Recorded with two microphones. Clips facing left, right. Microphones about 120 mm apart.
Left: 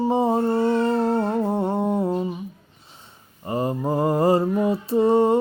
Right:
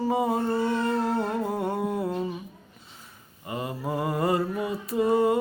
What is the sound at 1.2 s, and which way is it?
Humming, 30° left (ahead or behind).